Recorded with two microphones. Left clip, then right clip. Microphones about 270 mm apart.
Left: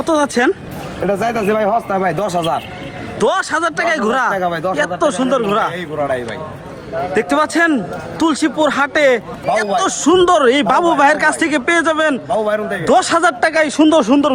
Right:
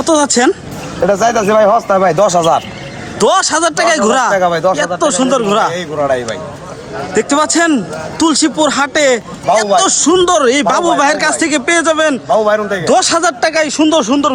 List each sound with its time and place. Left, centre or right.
0.0 s a man's voice: centre
1.0 s speech: centre
3.2 s a man's voice: centre
4.7 s a man's voice: centre
12.3 s speech: centre
12.8 s a man's voice: centre